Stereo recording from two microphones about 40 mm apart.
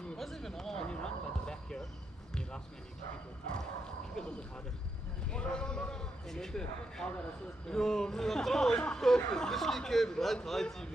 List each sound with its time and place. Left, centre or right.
0.2 s a sound: centre
3.5 s bow-wow: centre
5.3 s a man's voice: left